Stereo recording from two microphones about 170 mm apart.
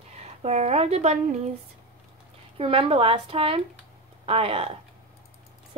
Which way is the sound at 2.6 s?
35° right (ahead or behind).